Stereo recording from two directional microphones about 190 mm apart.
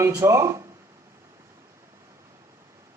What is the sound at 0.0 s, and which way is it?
Speech, 15° right (ahead or behind).